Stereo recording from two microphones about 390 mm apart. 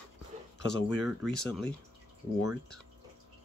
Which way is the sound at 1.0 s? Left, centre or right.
Centre.